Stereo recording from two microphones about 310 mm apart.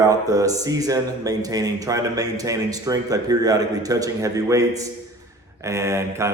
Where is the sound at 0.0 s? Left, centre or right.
Centre.